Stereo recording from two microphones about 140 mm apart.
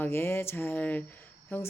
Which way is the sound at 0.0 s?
15° left (ahead or behind).